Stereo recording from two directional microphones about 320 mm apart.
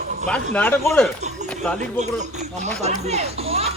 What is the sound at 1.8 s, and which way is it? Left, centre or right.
Speech, right.